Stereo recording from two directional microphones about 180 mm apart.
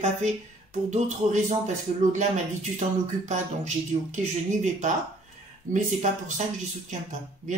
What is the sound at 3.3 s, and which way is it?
Speech, 40° right (ahead or behind).